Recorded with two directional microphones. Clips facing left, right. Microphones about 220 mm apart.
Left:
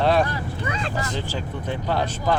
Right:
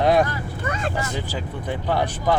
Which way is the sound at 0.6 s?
50° right (ahead or behind).